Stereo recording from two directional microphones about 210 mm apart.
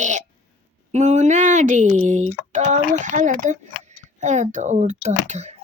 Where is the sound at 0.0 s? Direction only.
35° right (ahead or behind).